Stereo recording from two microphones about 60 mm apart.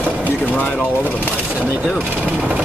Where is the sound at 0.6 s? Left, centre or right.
Left.